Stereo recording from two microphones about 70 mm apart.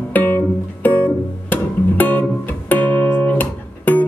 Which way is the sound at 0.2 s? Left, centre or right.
Left.